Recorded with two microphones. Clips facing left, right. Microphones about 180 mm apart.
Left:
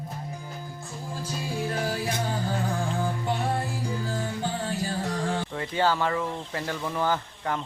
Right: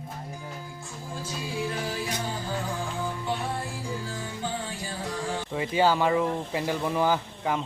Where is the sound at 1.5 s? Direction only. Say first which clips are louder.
Left 2 dB; 45° left (ahead or behind).